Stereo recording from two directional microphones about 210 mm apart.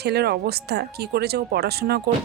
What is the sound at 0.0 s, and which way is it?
Speech, 50° right (ahead or behind).